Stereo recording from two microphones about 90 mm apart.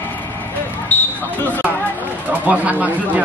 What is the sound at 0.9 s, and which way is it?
Basketball bounce, 20° left (ahead or behind).